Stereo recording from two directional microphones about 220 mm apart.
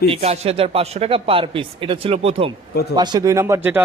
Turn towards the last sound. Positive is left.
turn(degrees=-10)  # may be behind; listen again after turning